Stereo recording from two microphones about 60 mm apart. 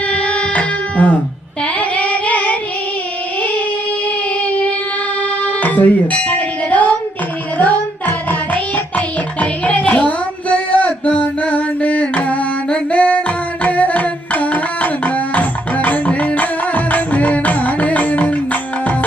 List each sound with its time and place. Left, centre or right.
0.1 s music: left
1.6 s female singing: left
4.4 s child singing: left
5.4 s music: left